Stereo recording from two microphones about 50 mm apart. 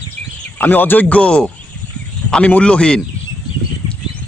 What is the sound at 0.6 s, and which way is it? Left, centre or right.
Speech, left.